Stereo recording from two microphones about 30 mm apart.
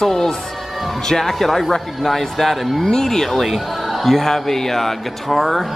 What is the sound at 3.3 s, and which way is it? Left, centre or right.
Speech, centre.